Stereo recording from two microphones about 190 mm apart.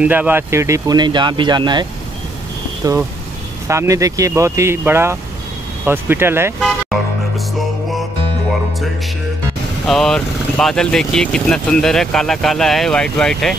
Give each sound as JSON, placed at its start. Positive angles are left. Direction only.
{"t": 0.0, "sound": "speech", "side_deg": -10}
{"t": 3.6, "sound": "speech", "side_deg": -15}
{"t": 6.6, "sound": "music", "side_deg": 0}
{"t": 9.8, "sound": "speech", "side_deg": 0}